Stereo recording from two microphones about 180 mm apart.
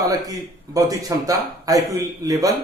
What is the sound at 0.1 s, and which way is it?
Speech, 20° right (ahead or behind).